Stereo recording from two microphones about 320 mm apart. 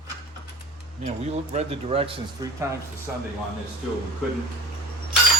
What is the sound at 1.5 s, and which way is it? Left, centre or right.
Speech, centre.